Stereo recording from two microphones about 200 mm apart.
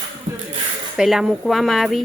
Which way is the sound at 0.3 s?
15° right (ahead or behind).